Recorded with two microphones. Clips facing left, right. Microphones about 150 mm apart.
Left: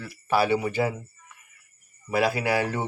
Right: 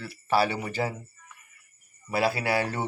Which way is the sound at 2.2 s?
15° left (ahead or behind).